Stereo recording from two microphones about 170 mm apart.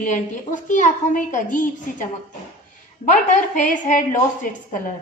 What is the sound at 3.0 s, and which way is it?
A woman's voice, 45° left (ahead or behind).